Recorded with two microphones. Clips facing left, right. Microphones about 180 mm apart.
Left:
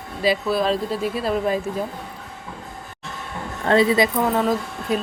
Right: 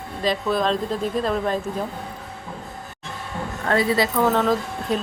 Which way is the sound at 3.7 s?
20° left (ahead or behind).